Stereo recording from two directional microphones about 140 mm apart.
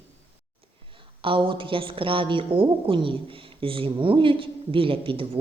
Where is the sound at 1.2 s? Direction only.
40° right (ahead or behind).